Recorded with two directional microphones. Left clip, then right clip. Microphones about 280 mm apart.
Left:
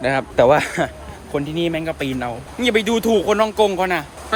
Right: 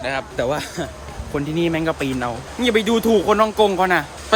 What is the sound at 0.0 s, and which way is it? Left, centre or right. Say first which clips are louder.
Speech: left 7 dB; left.